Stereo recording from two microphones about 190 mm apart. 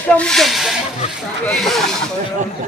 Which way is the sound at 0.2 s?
Centre (ahead or behind).